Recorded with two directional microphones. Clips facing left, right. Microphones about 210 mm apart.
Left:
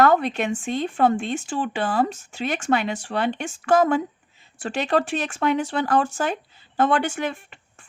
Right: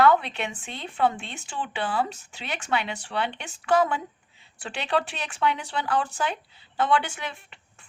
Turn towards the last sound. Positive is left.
turn(degrees=45)  # may be behind; listen again after turning